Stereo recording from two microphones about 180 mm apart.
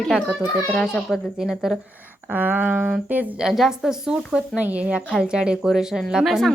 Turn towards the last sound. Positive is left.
turn(degrees=0)  # may be behind; listen again after turning